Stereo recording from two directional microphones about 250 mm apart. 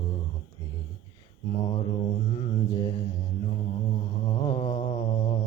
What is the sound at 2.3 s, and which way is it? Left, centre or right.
Mantra, left.